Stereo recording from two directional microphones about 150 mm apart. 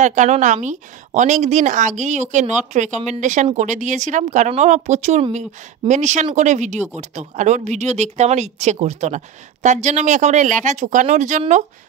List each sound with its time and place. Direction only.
0.0 s speech: 55° right (ahead or behind)